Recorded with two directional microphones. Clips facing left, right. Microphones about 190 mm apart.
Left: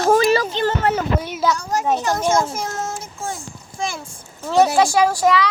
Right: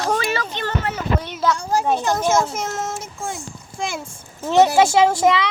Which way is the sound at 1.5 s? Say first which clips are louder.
Right 2 dB; 30° right (ahead or behind).